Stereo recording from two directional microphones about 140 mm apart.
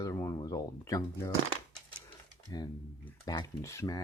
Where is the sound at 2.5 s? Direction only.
30° left (ahead or behind).